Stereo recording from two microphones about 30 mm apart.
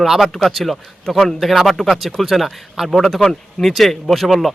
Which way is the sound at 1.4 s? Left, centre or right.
Centre.